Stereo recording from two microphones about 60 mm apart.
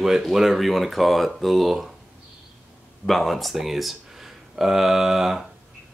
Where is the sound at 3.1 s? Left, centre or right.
Centre.